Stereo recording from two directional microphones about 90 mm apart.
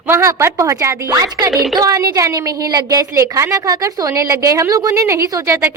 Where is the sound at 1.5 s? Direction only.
5° right (ahead or behind).